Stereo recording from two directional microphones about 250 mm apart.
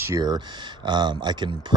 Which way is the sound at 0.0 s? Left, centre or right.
Centre.